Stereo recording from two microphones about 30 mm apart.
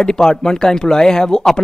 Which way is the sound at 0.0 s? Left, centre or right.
Left.